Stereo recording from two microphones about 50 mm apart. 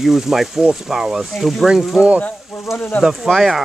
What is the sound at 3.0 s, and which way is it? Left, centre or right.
Speech, centre.